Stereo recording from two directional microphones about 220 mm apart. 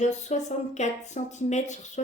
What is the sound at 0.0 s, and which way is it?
Speech, 30° left (ahead or behind).